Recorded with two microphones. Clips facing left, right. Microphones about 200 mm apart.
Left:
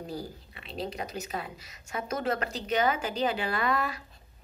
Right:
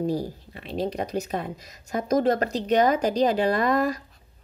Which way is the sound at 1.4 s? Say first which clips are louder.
Right 7 dB; 40° right (ahead or behind).